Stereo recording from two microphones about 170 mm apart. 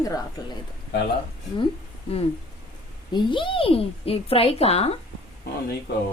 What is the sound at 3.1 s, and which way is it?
A woman's voice, 30° left (ahead or behind).